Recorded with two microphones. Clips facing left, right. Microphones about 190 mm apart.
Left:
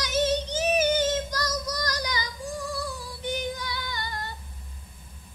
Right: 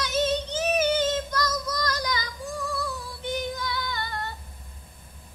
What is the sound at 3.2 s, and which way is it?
Female singing, 15° left (ahead or behind).